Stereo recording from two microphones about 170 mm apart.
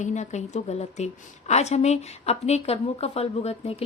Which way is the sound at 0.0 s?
45° left (ahead or behind).